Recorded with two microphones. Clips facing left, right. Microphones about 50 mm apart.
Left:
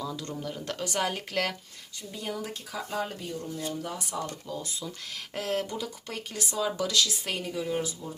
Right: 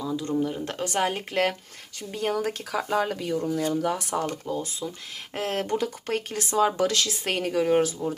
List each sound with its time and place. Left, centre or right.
0.0 s speech: centre
0.6 s speech: right
2.0 s speech: right
4.4 s speech: right